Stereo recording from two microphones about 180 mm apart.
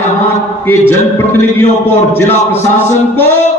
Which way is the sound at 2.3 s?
40° left (ahead or behind).